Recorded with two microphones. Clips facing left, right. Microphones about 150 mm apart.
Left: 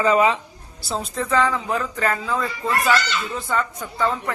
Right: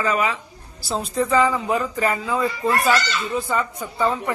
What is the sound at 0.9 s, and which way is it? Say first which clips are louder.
Speech: right 3 dB; centre (ahead or behind).